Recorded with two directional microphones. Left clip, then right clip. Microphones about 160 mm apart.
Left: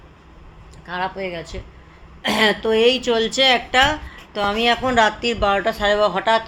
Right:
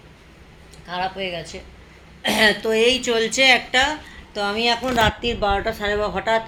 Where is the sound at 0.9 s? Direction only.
35° left (ahead or behind).